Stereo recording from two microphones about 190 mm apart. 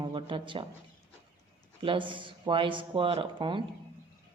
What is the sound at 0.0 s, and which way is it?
Speech, 25° right (ahead or behind).